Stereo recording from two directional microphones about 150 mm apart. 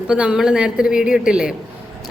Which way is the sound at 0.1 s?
5° right (ahead or behind).